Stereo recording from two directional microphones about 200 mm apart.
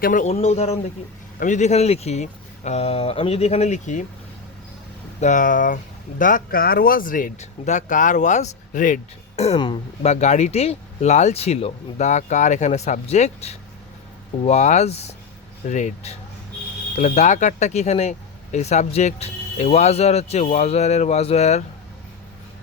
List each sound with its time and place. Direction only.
0.0 s speech: 40° left (ahead or behind)
5.2 s speech: 40° left (ahead or behind)